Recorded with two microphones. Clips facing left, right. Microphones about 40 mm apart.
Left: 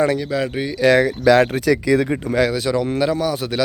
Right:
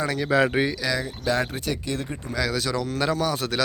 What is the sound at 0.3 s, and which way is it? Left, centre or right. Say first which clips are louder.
Speech: right 1 dB; centre.